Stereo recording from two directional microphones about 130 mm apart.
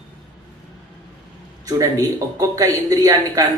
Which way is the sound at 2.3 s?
25° right (ahead or behind).